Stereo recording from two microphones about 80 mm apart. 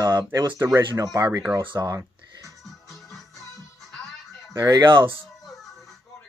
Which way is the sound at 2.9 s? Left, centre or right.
Centre.